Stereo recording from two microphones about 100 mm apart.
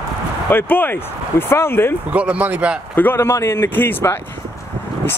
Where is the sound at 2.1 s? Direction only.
15° right (ahead or behind).